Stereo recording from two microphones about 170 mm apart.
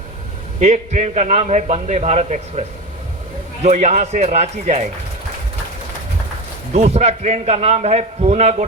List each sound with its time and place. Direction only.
0.6 s a man's voice: 45° right (ahead or behind)
6.7 s a man's voice: 40° right (ahead or behind)